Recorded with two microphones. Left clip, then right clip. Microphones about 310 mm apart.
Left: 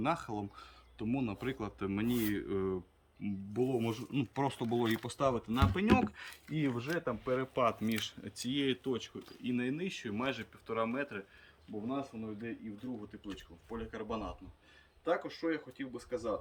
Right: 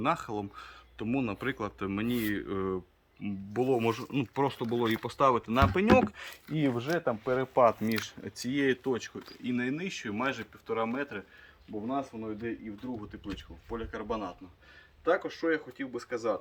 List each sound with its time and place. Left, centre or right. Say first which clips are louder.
0.0 s speech: right 5 dB; centre
5.9 s speech: right 7 dB; right; by 16.3 s centre